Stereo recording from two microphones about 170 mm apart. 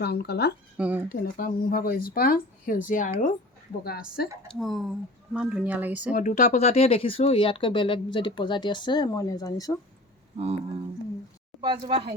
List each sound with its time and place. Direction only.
0.0 s speech: 70° left (ahead or behind)
0.8 s speech: 10° right (ahead or behind)
1.1 s speech: 60° left (ahead or behind)
4.2 s speech: 65° left (ahead or behind)
4.6 s speech: centre (ahead or behind)
6.1 s speech: 50° left (ahead or behind); by 9.7 s 20° left (ahead or behind)
10.3 s speech: 35° right (ahead or behind)
11.6 s speech: 25° right (ahead or behind)